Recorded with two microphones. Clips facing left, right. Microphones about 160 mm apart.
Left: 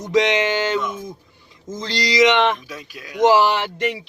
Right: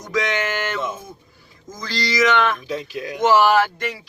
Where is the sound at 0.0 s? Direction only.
20° left (ahead or behind).